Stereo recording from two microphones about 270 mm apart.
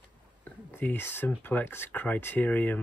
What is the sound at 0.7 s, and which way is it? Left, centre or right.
Speech, centre.